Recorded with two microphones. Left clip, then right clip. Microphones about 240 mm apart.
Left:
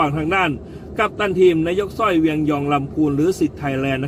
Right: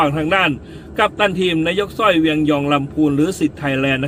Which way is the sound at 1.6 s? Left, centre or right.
Centre.